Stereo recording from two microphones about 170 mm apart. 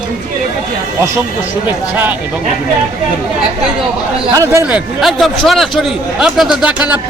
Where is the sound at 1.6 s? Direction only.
10° right (ahead or behind).